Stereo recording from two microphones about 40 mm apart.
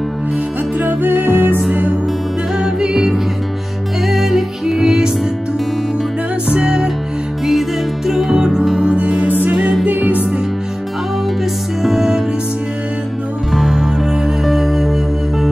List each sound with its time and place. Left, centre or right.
0.7 s music: right
2.6 s music: centre
6.5 s music: centre
8.1 s music: centre
8.8 s music: right
9.8 s music: right
11.8 s music: centre
13.5 s music: centre